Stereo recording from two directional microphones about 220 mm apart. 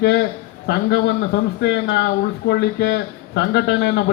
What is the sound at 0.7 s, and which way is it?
A man's voice, 50° left (ahead or behind).